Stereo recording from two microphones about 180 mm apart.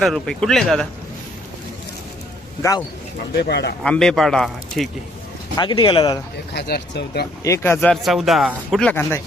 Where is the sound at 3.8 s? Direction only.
5° left (ahead or behind).